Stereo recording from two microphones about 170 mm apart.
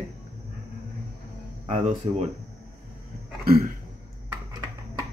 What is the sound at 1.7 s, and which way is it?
Speech, 35° right (ahead or behind).